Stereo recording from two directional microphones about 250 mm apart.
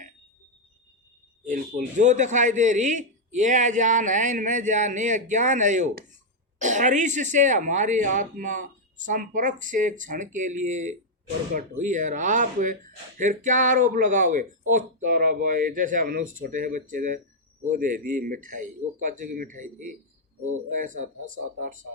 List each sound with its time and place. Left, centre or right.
1.5 s a man's voice: right